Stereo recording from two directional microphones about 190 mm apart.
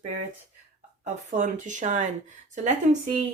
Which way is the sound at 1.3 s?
40° right (ahead or behind).